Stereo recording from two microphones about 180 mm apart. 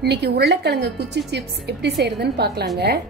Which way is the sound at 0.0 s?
65° right (ahead or behind).